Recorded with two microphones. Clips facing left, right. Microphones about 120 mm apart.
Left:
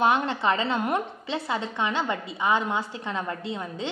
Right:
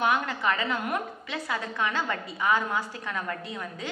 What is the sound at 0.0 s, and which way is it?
A woman's voice, 30° left (ahead or behind).